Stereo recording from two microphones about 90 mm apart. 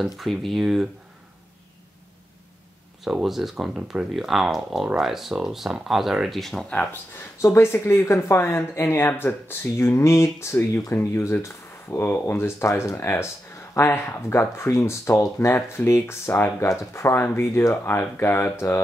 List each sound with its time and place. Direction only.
0.0 s speech: centre (ahead or behind)
3.0 s speech: 5° right (ahead or behind)
7.4 s speech: 30° left (ahead or behind)